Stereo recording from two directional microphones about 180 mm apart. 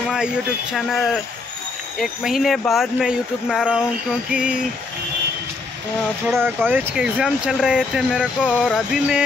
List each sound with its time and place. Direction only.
0.7 s speech: centre (ahead or behind)
6.2 s speech: 10° right (ahead or behind)